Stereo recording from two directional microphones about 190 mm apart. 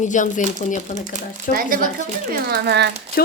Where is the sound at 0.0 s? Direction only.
40° left (ahead or behind).